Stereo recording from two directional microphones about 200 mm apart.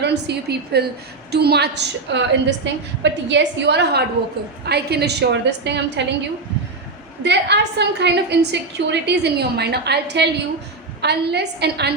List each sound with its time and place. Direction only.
0.0 s a woman's voice: 55° right (ahead or behind)
7.2 s a woman's voice: 60° right (ahead or behind)